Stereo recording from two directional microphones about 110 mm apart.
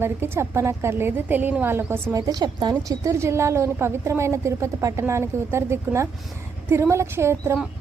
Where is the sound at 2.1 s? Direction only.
35° right (ahead or behind).